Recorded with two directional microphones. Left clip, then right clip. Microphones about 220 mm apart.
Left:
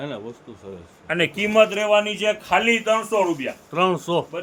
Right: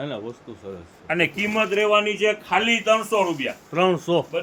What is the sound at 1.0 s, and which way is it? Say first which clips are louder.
Speech: even; 30° left (ahead or behind).